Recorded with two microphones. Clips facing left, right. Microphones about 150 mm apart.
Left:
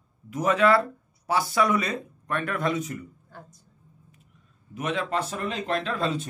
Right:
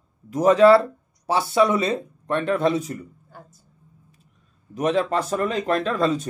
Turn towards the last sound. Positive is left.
turn(degrees=-40)  # may be behind; listen again after turning